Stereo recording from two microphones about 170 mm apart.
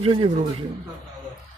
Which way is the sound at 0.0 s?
35° right (ahead or behind).